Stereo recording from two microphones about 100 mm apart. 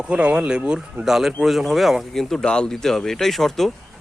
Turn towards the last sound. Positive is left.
turn(degrees=5)  # may be behind; listen again after turning